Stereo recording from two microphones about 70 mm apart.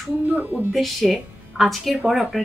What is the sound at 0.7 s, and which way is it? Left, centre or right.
A woman's voice, centre.